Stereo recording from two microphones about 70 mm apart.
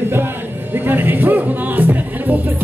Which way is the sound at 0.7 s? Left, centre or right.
Right.